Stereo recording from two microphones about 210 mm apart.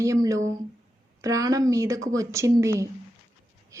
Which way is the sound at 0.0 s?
15° right (ahead or behind).